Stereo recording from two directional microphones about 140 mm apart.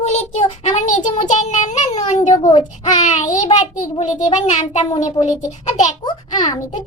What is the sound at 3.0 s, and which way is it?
Child singing, 55° left (ahead or behind).